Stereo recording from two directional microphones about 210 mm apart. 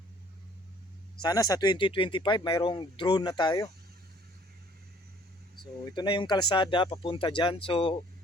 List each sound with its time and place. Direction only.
1.2 s speech: 15° left (ahead or behind)
5.8 s speech: 20° left (ahead or behind)